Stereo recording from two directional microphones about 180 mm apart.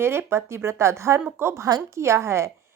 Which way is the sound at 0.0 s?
15° right (ahead or behind).